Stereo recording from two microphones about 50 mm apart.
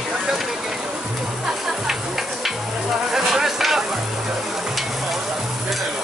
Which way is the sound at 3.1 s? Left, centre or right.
Centre.